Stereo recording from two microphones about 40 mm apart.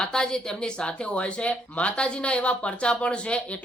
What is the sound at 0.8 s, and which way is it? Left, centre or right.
Speech, left.